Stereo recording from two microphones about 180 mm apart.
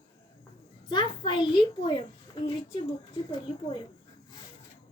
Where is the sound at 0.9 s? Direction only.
25° left (ahead or behind).